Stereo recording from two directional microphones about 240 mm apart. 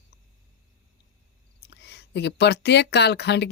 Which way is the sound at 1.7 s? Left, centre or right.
Left.